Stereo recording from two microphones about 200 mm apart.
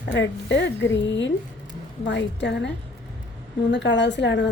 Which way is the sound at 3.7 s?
65° left (ahead or behind).